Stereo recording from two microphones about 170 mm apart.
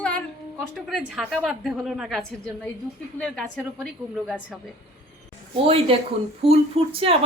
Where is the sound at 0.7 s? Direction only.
Centre (ahead or behind).